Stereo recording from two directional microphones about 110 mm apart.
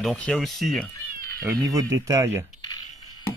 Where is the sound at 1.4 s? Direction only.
35° right (ahead or behind).